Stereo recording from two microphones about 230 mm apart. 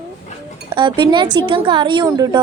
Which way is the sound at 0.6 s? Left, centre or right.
Right.